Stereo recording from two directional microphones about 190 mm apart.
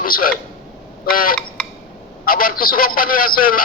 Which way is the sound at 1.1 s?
50° left (ahead or behind).